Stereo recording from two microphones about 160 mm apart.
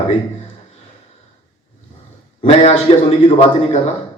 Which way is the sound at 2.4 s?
40° left (ahead or behind).